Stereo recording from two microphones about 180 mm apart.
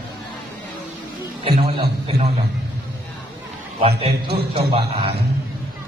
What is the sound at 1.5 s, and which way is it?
Speech, 30° right (ahead or behind).